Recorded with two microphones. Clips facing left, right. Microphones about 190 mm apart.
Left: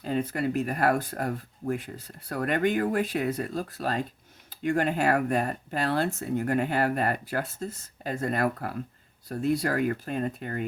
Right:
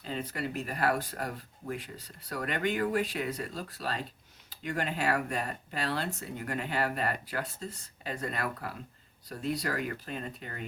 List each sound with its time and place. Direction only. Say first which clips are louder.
0.0 s speech: left 8 dB; 50° left (ahead or behind)